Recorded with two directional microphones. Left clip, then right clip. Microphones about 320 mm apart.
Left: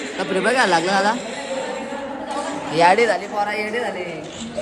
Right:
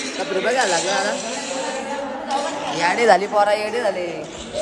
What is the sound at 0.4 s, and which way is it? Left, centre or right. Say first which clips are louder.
Speech: left 2 dB; left.